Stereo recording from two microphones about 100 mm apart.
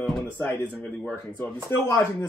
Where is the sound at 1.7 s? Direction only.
25° left (ahead or behind).